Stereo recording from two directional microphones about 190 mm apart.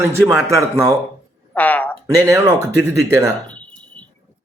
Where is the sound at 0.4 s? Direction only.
15° right (ahead or behind).